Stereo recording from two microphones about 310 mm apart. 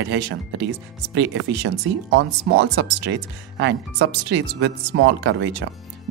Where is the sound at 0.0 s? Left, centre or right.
Right.